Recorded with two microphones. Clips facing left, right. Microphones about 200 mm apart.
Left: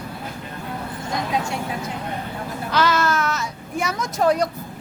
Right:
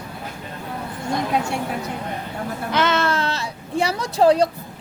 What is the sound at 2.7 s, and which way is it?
A woman's voice, 25° right (ahead or behind).